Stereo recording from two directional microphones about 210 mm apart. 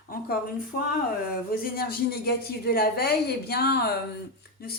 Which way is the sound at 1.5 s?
45° left (ahead or behind).